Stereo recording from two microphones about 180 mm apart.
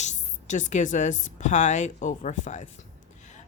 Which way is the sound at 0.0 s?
40° left (ahead or behind).